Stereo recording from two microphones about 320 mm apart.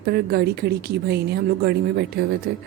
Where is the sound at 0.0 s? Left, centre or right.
Right.